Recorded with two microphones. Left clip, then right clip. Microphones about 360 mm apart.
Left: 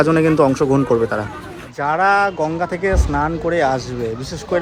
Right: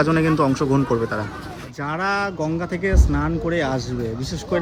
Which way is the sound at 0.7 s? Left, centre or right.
Left.